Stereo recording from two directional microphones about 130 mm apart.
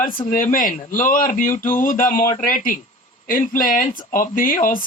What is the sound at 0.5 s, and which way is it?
Speech, 90° left.